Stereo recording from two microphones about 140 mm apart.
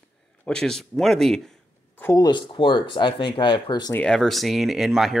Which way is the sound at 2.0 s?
20° left (ahead or behind).